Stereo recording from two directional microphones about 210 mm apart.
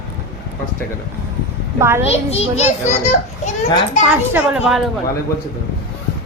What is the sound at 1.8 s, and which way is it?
Speech, 10° right (ahead or behind).